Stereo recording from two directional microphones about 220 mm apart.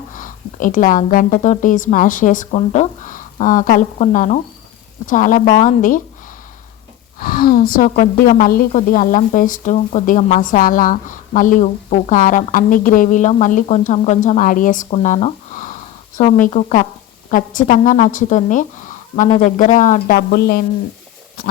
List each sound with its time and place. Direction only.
0.1 s a woman's voice: 35° left (ahead or behind)
7.2 s a woman's voice: 40° left (ahead or behind)